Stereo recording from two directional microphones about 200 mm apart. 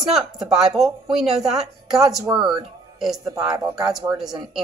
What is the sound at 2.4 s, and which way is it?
Speech, 20° right (ahead or behind).